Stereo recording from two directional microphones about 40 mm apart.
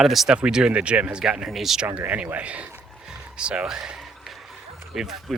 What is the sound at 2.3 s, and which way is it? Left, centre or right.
Speech, right.